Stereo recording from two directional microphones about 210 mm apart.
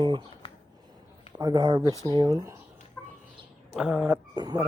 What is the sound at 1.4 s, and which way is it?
Speech, 20° right (ahead or behind).